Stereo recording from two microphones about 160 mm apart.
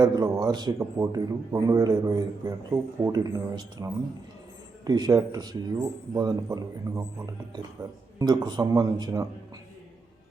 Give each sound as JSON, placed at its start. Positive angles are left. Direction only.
{"t": 0.0, "sound": "a man's voice", "side_deg": -25}